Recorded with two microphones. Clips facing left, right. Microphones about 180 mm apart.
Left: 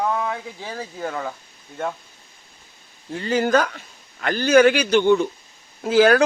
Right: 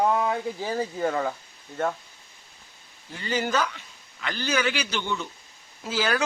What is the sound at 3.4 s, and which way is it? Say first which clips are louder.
Speech: left 8 dB; 55° left (ahead or behind).